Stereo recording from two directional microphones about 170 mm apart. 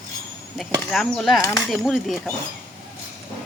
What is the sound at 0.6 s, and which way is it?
Speech, centre (ahead or behind).